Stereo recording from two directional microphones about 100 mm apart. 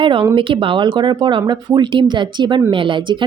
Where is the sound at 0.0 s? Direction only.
55° right (ahead or behind).